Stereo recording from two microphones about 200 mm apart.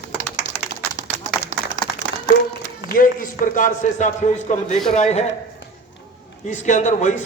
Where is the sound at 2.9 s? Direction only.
45° left (ahead or behind).